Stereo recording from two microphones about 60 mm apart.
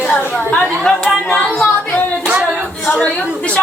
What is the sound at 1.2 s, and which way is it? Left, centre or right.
Music, left.